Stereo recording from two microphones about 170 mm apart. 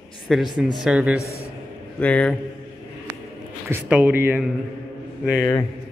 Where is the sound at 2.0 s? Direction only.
10° left (ahead or behind).